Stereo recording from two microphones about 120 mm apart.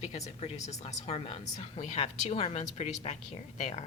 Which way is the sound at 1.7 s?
70° left (ahead or behind).